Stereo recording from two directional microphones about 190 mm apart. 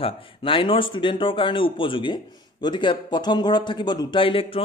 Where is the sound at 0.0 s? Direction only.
25° left (ahead or behind).